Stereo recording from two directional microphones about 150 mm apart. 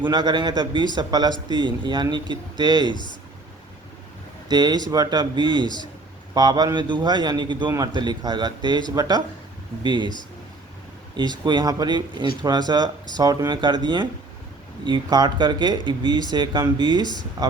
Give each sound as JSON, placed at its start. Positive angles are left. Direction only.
{"t": 0.1, "sound": "a man's voice", "side_deg": -30}
{"t": 4.4, "sound": "a man's voice", "side_deg": -30}
{"t": 11.2, "sound": "a man's voice", "side_deg": -30}